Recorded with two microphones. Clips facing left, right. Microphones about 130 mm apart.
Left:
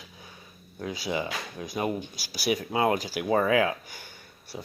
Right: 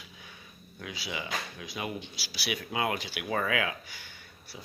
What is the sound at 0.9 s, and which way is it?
Speech, 45° left (ahead or behind).